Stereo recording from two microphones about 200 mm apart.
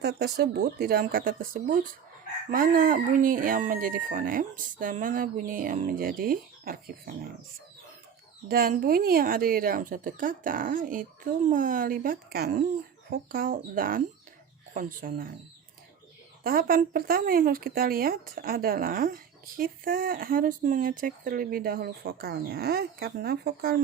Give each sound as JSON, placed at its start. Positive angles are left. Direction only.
{"t": 0.0, "sound": "speech", "side_deg": -55}
{"t": 8.4, "sound": "speech", "side_deg": -45}
{"t": 16.4, "sound": "speech", "side_deg": -45}